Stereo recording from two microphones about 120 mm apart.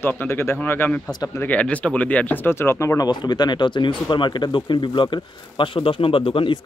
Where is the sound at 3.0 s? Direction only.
35° left (ahead or behind).